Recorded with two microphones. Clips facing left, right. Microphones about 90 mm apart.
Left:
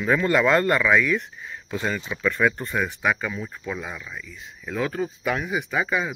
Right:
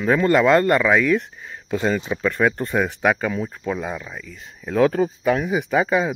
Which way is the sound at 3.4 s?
35° right (ahead or behind).